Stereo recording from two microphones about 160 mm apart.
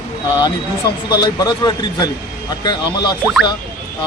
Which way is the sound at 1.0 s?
25° left (ahead or behind).